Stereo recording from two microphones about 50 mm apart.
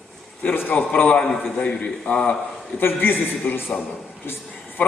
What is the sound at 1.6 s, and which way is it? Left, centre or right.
Speech, left.